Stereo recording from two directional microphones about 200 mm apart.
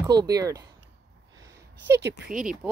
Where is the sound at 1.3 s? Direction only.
15° right (ahead or behind).